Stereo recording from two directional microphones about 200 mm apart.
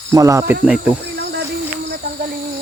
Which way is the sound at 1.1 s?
55° right (ahead or behind).